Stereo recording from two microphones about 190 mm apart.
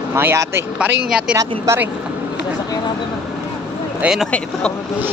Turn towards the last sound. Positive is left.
turn(degrees=5)  # may be behind; listen again after turning